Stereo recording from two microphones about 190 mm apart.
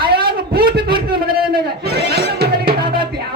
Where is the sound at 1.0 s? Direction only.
50° right (ahead or behind).